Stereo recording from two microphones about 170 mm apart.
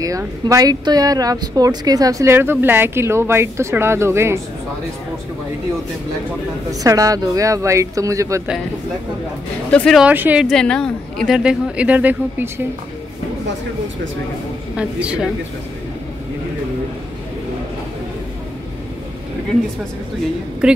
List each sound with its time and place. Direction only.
0.0 s speech: 20° right (ahead or behind)
6.7 s speech: 20° right (ahead or behind)
9.7 s speech: 5° left (ahead or behind)
10.0 s speech: 10° right (ahead or behind)
10.5 s speech: 5° left (ahead or behind); by 12.6 s 10° right (ahead or behind)
14.8 s speech: 5° right (ahead or behind)
20.6 s speech: 5° right (ahead or behind)